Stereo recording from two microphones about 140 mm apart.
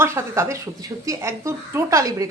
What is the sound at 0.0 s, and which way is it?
A woman's voice, 20° right (ahead or behind).